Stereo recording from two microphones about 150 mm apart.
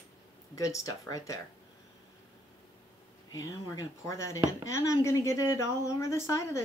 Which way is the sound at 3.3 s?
20° left (ahead or behind).